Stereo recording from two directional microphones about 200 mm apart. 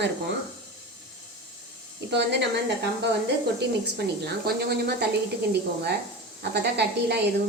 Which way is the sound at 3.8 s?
55° right (ahead or behind).